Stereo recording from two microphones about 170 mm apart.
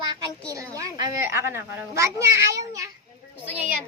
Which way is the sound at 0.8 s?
20° right (ahead or behind).